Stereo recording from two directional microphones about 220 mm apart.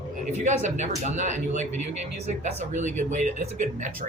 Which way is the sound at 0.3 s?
30° right (ahead or behind).